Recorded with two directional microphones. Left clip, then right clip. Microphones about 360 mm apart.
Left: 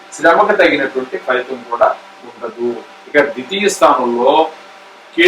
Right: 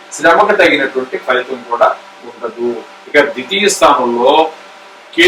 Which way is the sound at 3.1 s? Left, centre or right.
Centre.